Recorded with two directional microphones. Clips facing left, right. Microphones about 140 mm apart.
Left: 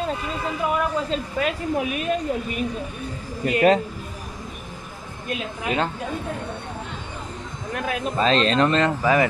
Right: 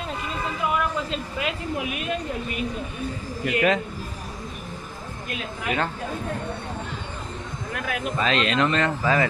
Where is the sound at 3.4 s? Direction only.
35° left (ahead or behind).